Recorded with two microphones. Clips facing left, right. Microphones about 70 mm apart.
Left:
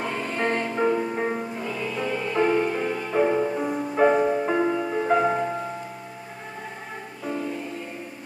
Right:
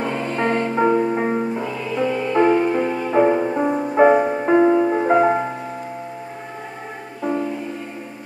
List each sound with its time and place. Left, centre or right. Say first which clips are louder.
0.0 s music: right 5 dB; centre
0.7 s music: right 7 dB; right
2.3 s music: right 6 dB; right